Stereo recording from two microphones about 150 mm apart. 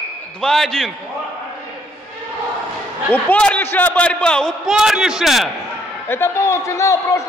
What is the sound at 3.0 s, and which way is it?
A man's voice, 10° left (ahead or behind).